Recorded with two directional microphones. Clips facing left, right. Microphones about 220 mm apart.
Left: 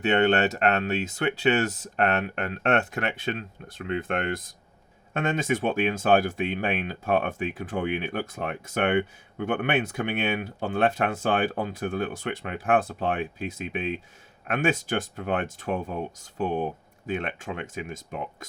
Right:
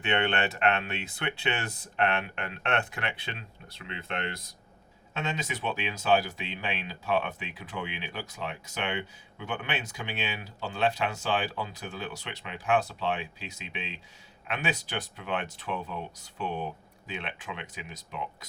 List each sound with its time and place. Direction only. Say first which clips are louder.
0.0 s speech: left 7 dB; 40° left (ahead or behind)